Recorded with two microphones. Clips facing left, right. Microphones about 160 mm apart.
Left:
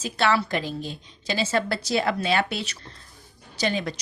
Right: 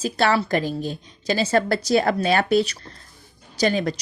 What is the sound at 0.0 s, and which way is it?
A woman's voice, 40° right (ahead or behind).